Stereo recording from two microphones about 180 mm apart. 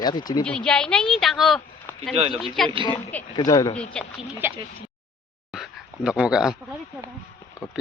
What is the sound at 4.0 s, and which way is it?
Speech, 5° left (ahead or behind).